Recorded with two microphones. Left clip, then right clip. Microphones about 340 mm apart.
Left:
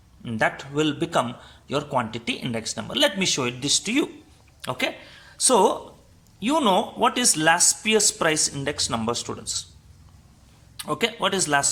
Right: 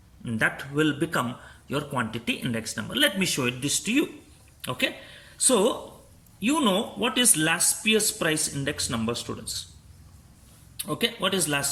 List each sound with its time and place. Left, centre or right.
0.3 s speech: centre
5.4 s speech: centre
10.9 s speech: centre